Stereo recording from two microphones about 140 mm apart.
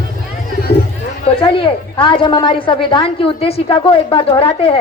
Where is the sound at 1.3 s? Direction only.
40° left (ahead or behind).